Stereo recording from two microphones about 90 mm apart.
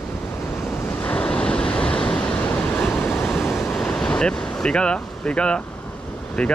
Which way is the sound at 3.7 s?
10° left (ahead or behind).